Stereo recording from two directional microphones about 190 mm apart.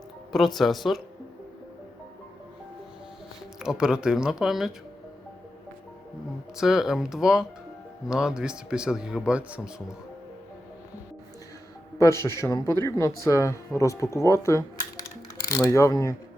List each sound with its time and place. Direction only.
0.3 s speech: centre (ahead or behind)
3.6 s speech: 5° right (ahead or behind)
6.6 s speech: 5° right (ahead or behind)
11.9 s speech: 15° left (ahead or behind)